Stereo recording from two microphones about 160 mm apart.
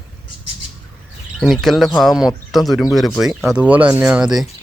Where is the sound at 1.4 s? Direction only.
Centre (ahead or behind).